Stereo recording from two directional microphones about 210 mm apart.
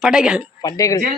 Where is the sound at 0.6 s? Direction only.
15° left (ahead or behind).